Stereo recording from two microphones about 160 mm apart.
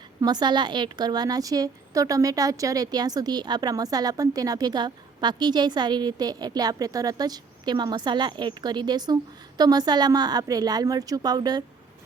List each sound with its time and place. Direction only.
0.2 s a woman's voice: 25° right (ahead or behind)